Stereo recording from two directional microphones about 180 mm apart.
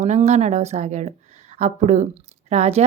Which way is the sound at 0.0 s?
40° right (ahead or behind).